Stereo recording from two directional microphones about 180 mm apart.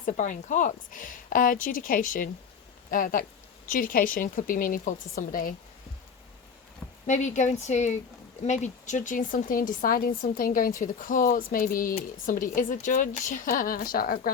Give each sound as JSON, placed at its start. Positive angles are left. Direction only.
{"t": 0.0, "sound": "speech", "side_deg": 45}
{"t": 7.1, "sound": "speech", "side_deg": 40}